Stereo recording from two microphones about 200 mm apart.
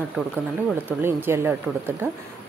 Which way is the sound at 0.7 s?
10° right (ahead or behind).